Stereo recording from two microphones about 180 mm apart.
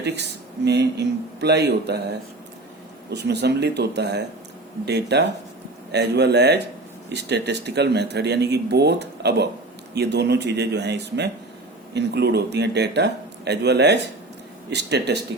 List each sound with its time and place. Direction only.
0.0 s speech: 70° right (ahead or behind)